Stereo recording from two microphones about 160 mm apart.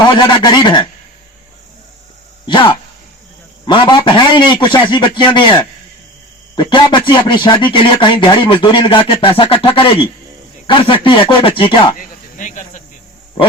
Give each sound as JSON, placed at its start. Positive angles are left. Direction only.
{"t": 0.1, "sound": "a man's voice", "side_deg": 30}
{"t": 2.5, "sound": "a man's voice", "side_deg": 30}
{"t": 11.9, "sound": "cricket", "side_deg": 55}